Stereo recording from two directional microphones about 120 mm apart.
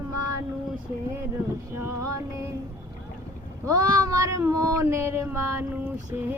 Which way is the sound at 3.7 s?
30° right (ahead or behind).